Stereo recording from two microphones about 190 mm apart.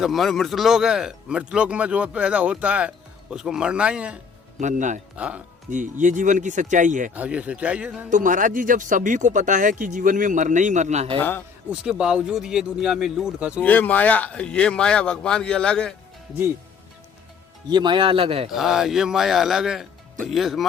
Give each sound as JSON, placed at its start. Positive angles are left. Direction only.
{"t": 0.0, "sound": "a man's voice", "side_deg": 0}
{"t": 4.6, "sound": "speech", "side_deg": -40}
{"t": 5.1, "sound": "speech", "side_deg": -5}
{"t": 5.7, "sound": "speech", "side_deg": -40}
{"t": 7.1, "sound": "speech", "side_deg": -5}
{"t": 8.1, "sound": "speech", "side_deg": -45}
{"t": 11.2, "sound": "speech", "side_deg": 10}
{"t": 11.7, "sound": "a man's voice", "side_deg": -5}
{"t": 13.6, "sound": "a man's voice", "side_deg": 10}
{"t": 17.7, "sound": "a man's voice", "side_deg": -25}
{"t": 18.5, "sound": "a man's voice", "side_deg": 0}